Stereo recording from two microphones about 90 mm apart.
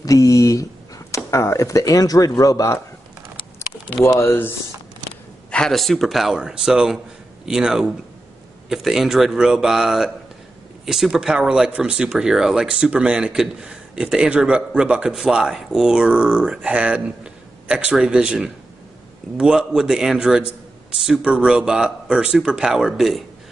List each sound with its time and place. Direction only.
0.0 s a sound: 40° left (ahead or behind)
4.2 s speech: 25° left (ahead or behind)
5.5 s speech: 5° left (ahead or behind)